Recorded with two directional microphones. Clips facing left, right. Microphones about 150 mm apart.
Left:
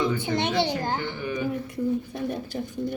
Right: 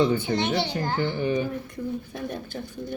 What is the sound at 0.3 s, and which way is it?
Speech, 20° left (ahead or behind).